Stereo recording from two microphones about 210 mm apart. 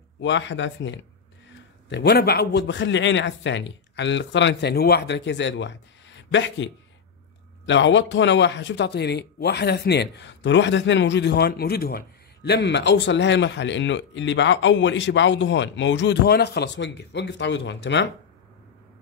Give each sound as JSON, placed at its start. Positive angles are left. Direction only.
{"t": 0.2, "sound": "a man's voice", "side_deg": 60}